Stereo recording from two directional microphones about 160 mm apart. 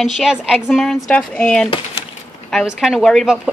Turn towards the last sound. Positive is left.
turn(degrees=0)  # may be behind; listen again after turning